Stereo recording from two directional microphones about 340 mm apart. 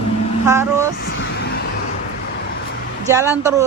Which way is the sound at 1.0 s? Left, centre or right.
Left.